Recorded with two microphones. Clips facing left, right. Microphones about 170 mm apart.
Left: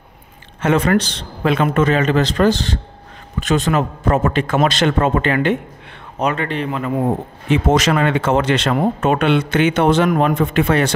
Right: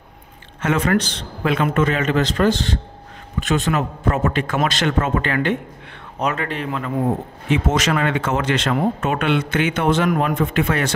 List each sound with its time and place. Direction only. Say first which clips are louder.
0.6 s a man's voice: left 3 dB; 30° left (ahead or behind)
5.3 s a man's voice: left 3 dB; 20° left (ahead or behind)
6.1 s speech: left 3 dB; centre (ahead or behind)
7.5 s a man's voice: left 4 dB; 35° left (ahead or behind)